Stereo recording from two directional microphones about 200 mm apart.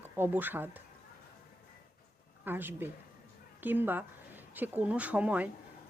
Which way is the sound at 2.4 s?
10° right (ahead or behind).